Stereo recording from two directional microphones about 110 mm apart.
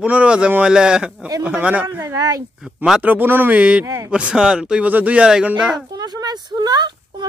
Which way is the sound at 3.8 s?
25° right (ahead or behind).